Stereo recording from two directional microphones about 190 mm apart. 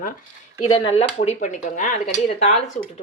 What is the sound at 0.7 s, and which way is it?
Speech, 30° left (ahead or behind).